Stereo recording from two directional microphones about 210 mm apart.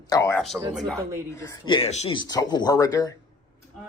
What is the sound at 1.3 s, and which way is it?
Speech, 25° left (ahead or behind).